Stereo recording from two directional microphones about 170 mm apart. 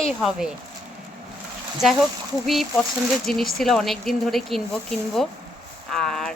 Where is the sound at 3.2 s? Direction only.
Centre (ahead or behind).